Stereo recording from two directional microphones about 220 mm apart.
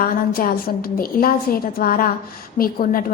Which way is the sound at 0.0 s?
40° left (ahead or behind).